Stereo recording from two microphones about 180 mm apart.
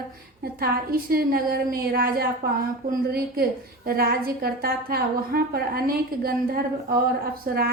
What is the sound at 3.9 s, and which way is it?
A woman's voice, 55° right (ahead or behind).